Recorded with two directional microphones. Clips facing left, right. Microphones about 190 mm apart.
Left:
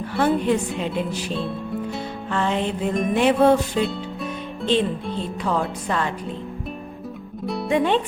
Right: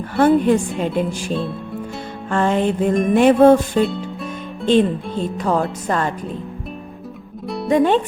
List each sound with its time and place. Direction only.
0.1 s music: 50° right (ahead or behind)
1.4 s music: centre (ahead or behind)
2.3 s music: 50° right (ahead or behind)
3.8 s music: centre (ahead or behind)
4.7 s music: 50° right (ahead or behind)
7.4 s music: centre (ahead or behind)
7.7 s music: 45° right (ahead or behind)